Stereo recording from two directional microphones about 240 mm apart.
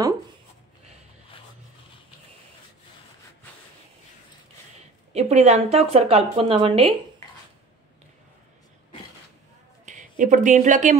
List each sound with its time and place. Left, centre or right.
5.1 s a woman's voice: right
9.8 s a woman's voice: right